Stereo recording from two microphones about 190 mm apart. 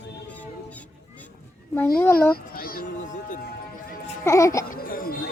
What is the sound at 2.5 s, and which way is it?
Music, 50° left (ahead or behind).